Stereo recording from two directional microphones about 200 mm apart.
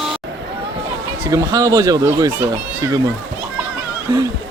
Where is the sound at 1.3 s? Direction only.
15° right (ahead or behind).